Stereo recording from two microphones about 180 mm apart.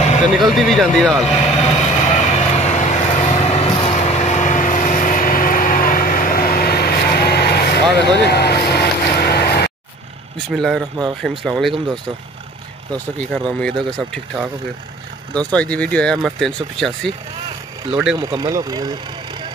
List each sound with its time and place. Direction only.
0.4 s speech: centre (ahead or behind)
1.3 s vehicle: 40° left (ahead or behind); by 9.7 s 60° left (ahead or behind)
10.5 s speech: centre (ahead or behind)
12.9 s speech: 5° left (ahead or behind)
18.1 s speech: 25° right (ahead or behind)